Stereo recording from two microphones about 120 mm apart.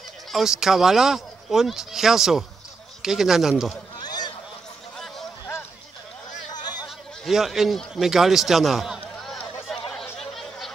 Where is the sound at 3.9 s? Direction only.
35° left (ahead or behind).